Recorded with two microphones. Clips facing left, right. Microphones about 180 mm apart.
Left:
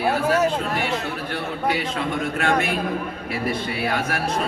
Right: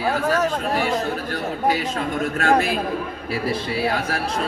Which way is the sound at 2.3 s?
35° right (ahead or behind).